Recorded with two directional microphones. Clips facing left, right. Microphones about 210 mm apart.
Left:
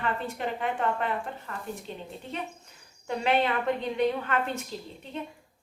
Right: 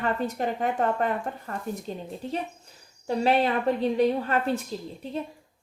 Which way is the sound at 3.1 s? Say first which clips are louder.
Right 3 dB; 35° right (ahead or behind).